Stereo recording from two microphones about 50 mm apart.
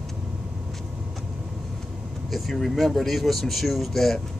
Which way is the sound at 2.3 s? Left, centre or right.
Centre.